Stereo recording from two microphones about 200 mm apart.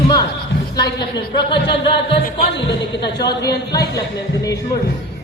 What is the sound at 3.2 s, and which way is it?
Speech, 15° left (ahead or behind).